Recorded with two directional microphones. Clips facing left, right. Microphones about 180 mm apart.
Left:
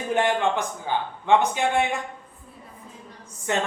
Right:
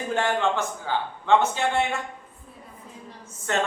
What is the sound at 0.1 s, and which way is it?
A man's voice, 15° left (ahead or behind).